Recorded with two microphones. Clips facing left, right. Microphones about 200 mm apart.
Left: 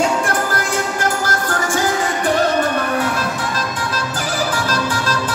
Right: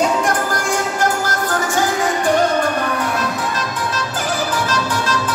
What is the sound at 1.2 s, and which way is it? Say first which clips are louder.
Music: even; 50° left (ahead or behind).